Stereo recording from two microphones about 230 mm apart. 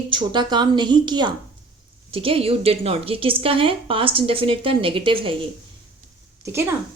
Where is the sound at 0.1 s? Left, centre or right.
Centre.